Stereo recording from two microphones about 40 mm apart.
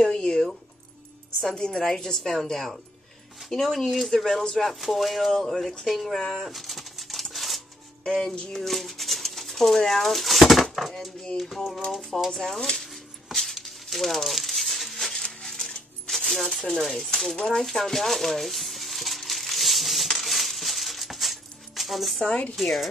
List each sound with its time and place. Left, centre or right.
0.0 s zipper: centre
1.6 s a woman's voice: centre
4.7 s speech: centre
6.3 s pigeon: centre
7.3 s a sound: centre
8.0 s music: centre
8.5 s a woman's voice: centre
12.3 s a sound: centre
20.2 s coin: centre
22.6 s speech: centre